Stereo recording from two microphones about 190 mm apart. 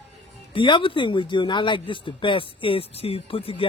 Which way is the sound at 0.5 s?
25° left (ahead or behind).